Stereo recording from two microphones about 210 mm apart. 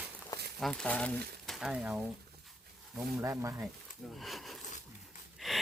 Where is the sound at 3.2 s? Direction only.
15° right (ahead or behind).